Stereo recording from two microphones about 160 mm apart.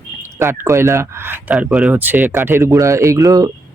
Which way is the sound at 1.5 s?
Centre (ahead or behind).